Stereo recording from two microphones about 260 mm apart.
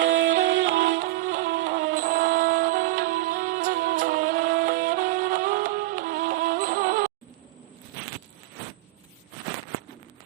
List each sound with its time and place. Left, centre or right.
0.0 s music: right
1.0 s music: right